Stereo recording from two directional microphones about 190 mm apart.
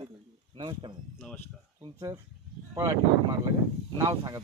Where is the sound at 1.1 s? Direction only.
10° left (ahead or behind).